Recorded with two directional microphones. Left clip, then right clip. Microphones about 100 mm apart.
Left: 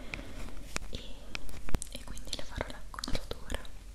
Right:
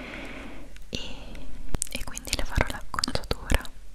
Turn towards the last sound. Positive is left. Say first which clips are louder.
# right 11 dB
turn(degrees=-40)  # may be behind; listen again after turning